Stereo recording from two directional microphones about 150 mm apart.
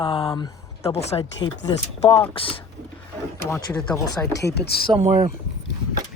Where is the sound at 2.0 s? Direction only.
20° left (ahead or behind).